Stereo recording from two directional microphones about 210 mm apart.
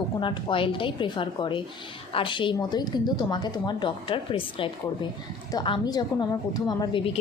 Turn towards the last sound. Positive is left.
turn(degrees=25)  # may be behind; listen again after turning